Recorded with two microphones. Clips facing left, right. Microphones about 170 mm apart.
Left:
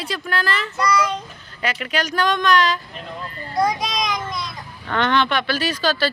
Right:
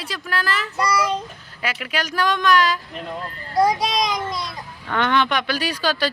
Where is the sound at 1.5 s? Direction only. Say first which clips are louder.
Left 2 dB; 5° right (ahead or behind).